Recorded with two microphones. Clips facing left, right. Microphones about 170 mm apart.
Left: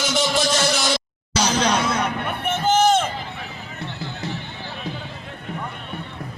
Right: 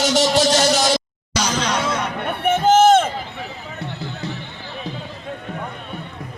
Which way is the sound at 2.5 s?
55° right (ahead or behind).